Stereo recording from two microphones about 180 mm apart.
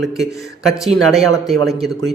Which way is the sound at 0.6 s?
Centre (ahead or behind).